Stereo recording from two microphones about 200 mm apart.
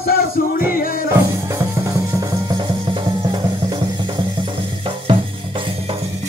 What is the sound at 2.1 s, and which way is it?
Music, 20° right (ahead or behind).